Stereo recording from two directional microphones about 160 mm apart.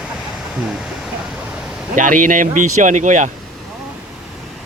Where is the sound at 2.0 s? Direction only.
55° right (ahead or behind).